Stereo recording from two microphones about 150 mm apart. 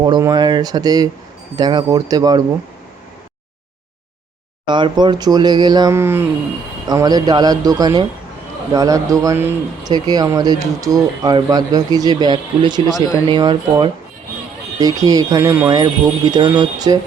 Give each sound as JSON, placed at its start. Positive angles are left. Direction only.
{"t": 0.0, "sound": "speech", "side_deg": -25}
{"t": 4.6, "sound": "speech", "side_deg": -30}